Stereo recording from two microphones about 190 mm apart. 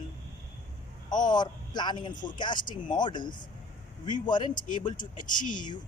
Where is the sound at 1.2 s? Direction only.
20° left (ahead or behind).